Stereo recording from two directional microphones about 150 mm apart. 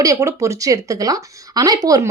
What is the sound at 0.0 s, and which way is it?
Speech, 20° right (ahead or behind).